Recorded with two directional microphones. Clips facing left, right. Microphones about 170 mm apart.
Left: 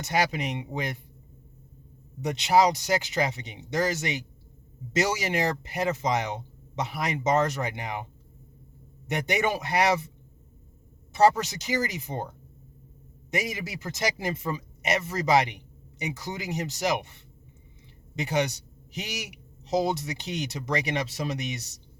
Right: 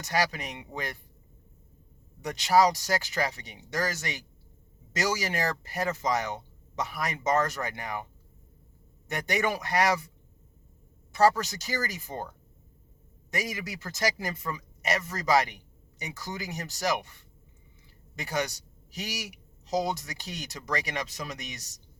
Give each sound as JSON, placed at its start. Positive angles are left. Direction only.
{"t": 0.0, "sound": "speech", "side_deg": 20}
{"t": 2.2, "sound": "speech", "side_deg": 20}
{"t": 9.0, "sound": "speech", "side_deg": 20}
{"t": 11.1, "sound": "speech", "side_deg": 20}
{"t": 13.3, "sound": "speech", "side_deg": 20}